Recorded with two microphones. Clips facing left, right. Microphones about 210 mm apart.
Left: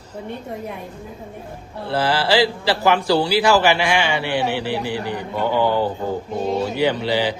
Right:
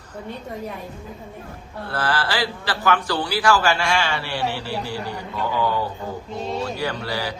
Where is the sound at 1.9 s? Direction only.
25° left (ahead or behind).